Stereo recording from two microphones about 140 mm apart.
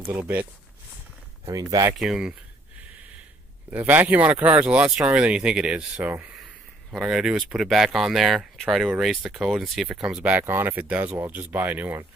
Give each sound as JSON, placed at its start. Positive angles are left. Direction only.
{"t": 0.1, "sound": "speech", "side_deg": -10}
{"t": 1.5, "sound": "speech", "side_deg": -25}
{"t": 2.0, "sound": "speech", "side_deg": -5}
{"t": 3.7, "sound": "speech", "side_deg": -15}